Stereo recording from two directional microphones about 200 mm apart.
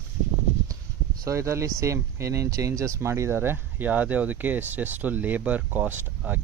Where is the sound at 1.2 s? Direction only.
15° right (ahead or behind).